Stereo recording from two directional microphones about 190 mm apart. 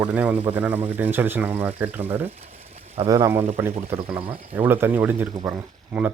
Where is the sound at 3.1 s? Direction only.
15° right (ahead or behind).